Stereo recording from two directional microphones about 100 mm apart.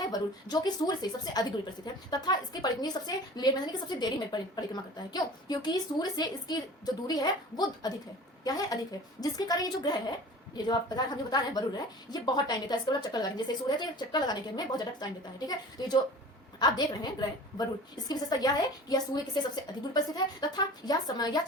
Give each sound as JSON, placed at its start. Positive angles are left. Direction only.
{"t": 0.0, "sound": "a woman's voice", "side_deg": 40}